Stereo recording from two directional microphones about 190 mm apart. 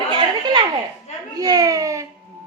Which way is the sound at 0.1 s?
25° right (ahead or behind).